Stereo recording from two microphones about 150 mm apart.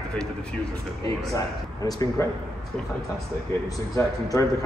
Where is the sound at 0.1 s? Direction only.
5° left (ahead or behind).